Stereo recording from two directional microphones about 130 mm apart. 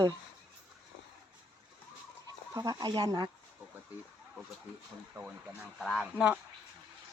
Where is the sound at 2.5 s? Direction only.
30° right (ahead or behind).